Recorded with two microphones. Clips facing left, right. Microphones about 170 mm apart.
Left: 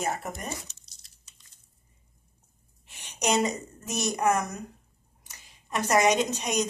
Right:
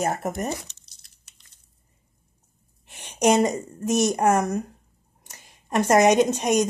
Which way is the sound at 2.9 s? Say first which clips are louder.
Right 7 dB; 55° right (ahead or behind).